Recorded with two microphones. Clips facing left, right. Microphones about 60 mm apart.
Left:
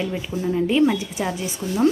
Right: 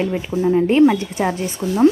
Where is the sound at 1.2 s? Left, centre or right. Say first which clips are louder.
Right 5 dB; right.